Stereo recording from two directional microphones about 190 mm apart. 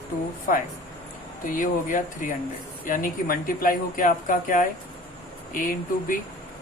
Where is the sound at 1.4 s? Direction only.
45° left (ahead or behind).